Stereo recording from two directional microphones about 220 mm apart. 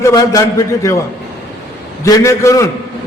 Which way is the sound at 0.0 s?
15° left (ahead or behind).